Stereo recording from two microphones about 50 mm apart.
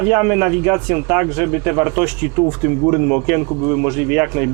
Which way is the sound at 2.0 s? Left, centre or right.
Centre.